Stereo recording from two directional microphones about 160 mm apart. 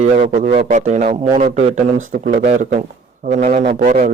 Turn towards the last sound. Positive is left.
turn(degrees=-45)  # may be behind; listen again after turning